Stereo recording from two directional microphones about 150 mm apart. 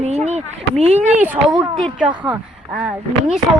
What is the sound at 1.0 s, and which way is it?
Speech, 10° right (ahead or behind).